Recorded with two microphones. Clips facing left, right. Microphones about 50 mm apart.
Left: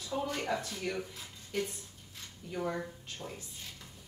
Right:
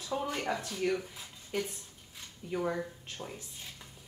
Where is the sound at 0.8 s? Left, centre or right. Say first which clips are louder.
Right 5 dB; centre.